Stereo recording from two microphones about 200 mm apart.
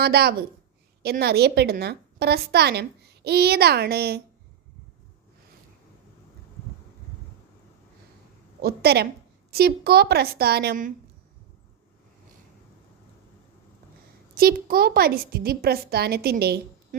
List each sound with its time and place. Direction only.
0.0 s a woman's voice: 55° right (ahead or behind)
8.6 s a woman's voice: 50° right (ahead or behind)
14.3 s a woman's voice: 50° right (ahead or behind)